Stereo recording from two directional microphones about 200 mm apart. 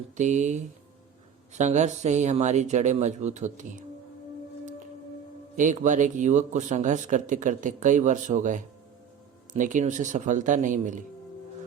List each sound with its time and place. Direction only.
0.2 s speech: 35° right (ahead or behind)
5.5 s speech: 40° right (ahead or behind)